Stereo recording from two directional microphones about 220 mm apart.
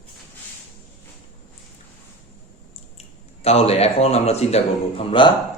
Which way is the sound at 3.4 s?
30° left (ahead or behind).